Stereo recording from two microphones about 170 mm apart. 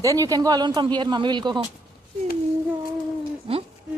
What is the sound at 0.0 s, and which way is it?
Speech, 20° right (ahead or behind).